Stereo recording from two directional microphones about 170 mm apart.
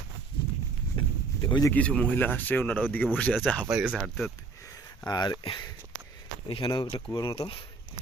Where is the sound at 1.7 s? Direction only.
5° left (ahead or behind).